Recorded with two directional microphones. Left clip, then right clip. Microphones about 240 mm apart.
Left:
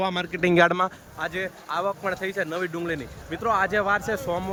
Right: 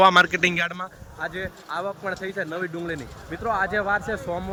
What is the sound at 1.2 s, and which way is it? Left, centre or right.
Speech, centre.